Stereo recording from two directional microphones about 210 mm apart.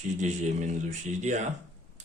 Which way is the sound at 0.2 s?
35° right (ahead or behind).